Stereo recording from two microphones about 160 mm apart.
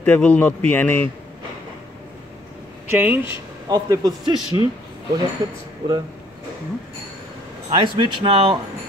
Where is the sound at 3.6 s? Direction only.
25° right (ahead or behind).